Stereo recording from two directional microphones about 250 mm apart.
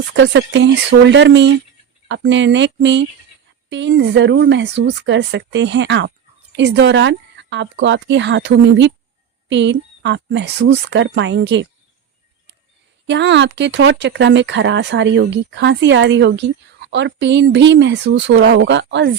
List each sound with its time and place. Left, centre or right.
0.1 s speech: right
13.1 s speech: right